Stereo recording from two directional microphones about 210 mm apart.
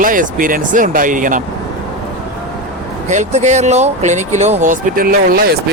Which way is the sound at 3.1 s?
35° right (ahead or behind).